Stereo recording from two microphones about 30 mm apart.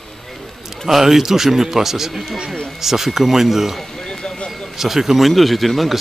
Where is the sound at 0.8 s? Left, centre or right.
Centre.